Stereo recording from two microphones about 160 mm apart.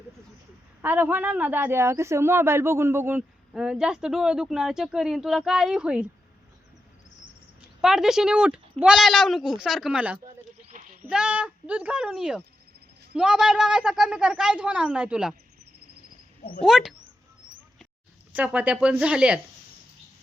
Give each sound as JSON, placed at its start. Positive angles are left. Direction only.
{"t": 0.8, "sound": "a woman's voice", "side_deg": -10}
{"t": 7.8, "sound": "speech", "side_deg": -5}
{"t": 10.7, "sound": "a sound", "side_deg": -55}
{"t": 11.0, "sound": "a woman's voice", "side_deg": -5}
{"t": 16.6, "sound": "speech", "side_deg": 0}
{"t": 18.3, "sound": "a woman's voice", "side_deg": -10}